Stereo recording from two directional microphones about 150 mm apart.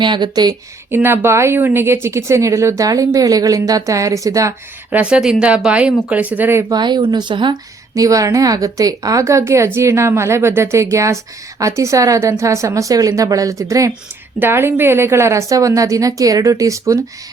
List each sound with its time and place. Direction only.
0.0 s a woman's voice: 30° right (ahead or behind)
0.9 s a woman's voice: 15° right (ahead or behind)
4.9 s speech: 5° right (ahead or behind)
6.7 s a woman's voice: 30° right (ahead or behind)